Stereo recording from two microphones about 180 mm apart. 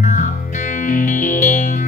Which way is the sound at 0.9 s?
45° left (ahead or behind).